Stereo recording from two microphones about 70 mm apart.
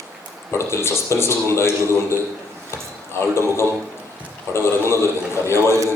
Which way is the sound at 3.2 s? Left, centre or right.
Left.